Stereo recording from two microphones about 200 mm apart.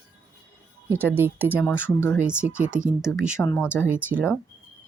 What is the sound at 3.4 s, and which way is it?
Speech, 10° left (ahead or behind).